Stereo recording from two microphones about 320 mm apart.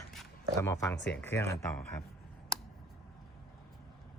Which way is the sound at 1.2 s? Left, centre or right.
Centre.